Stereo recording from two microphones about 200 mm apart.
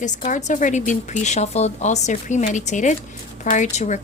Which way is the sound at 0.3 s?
40° left (ahead or behind).